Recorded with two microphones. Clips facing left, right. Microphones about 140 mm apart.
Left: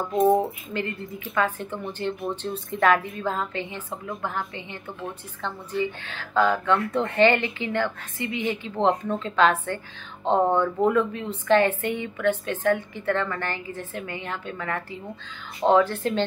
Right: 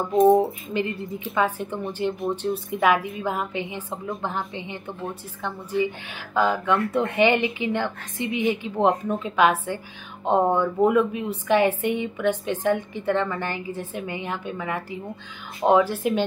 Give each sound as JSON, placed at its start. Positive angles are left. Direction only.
{"t": 0.3, "sound": "a woman's voice", "side_deg": -15}